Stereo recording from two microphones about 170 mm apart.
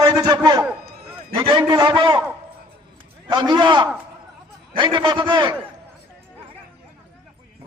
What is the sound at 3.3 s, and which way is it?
A man's voice, 25° right (ahead or behind).